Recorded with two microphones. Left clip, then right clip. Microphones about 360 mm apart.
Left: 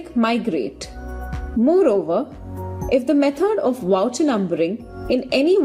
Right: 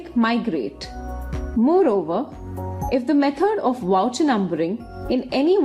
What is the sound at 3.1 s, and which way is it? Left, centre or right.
A woman's voice, centre.